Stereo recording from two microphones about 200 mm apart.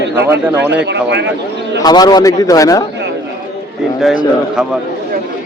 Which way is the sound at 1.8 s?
20° left (ahead or behind).